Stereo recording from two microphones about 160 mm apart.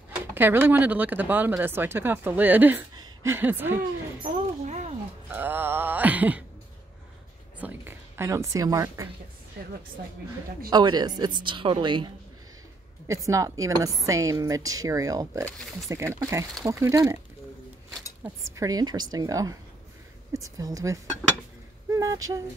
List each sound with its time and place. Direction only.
0.3 s speech: 15° right (ahead or behind)
4.2 s a sound: 45° right (ahead or behind)
5.3 s groan: 10° right (ahead or behind)
7.5 s speech: 10° right (ahead or behind)
10.7 s speech: 25° right (ahead or behind)
13.1 s speech: 20° right (ahead or behind)
18.2 s speech: 20° right (ahead or behind)